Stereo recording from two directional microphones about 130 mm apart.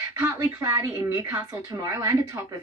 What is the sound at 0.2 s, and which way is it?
Speech, 20° right (ahead or behind).